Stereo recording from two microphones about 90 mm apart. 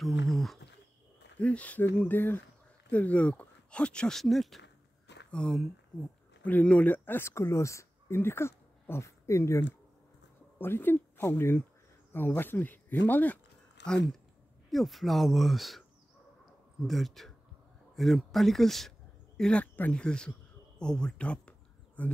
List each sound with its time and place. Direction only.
0.0 s speech: centre (ahead or behind)
1.4 s speech: 15° left (ahead or behind)
14.7 s speech: centre (ahead or behind)
16.8 s speech: centre (ahead or behind)
19.6 s speech: 20° left (ahead or behind)
20.8 s a sound: 10° left (ahead or behind)